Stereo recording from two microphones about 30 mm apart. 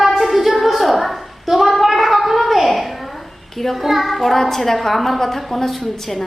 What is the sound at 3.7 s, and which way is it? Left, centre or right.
Child singing, centre.